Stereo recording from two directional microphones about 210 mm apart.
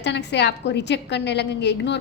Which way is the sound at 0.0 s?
55° left (ahead or behind).